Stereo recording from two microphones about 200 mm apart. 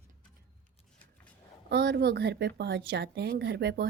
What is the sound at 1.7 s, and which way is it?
Speech, 55° right (ahead or behind).